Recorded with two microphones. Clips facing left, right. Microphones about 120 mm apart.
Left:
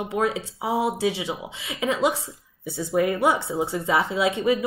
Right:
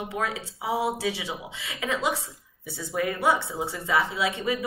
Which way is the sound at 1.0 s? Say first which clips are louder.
Left 5 dB; 25° left (ahead or behind).